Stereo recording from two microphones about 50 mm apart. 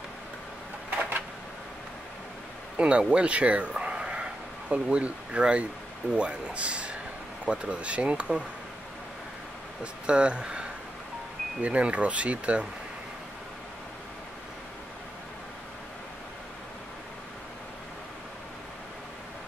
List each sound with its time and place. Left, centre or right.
2.8 s speech: right
10.0 s speech: centre